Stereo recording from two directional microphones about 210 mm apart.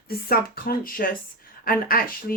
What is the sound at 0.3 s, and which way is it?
Speech, 45° left (ahead or behind).